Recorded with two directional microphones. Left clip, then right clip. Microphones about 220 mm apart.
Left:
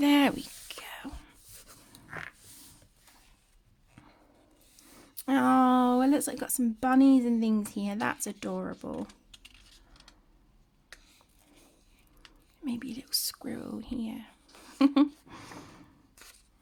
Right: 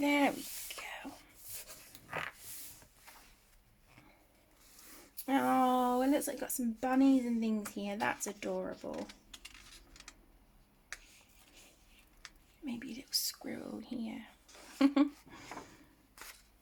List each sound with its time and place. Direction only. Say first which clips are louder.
0.0 s whispering: left 6 dB; 45° left (ahead or behind)
5.1 s speech: left 6 dB; 40° left (ahead or behind)
9.0 s typing: right 1 dB; 5° left (ahead or behind)
12.6 s whispering: left 6 dB; 40° left (ahead or behind)
14.8 s a sound: left 5 dB; 40° left (ahead or behind)